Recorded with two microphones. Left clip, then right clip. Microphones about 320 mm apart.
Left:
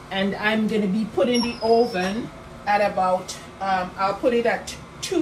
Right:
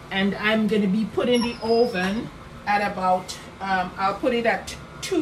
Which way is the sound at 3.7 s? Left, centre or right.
Centre.